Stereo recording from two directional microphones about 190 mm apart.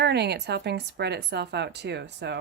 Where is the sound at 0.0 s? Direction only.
60° right (ahead or behind).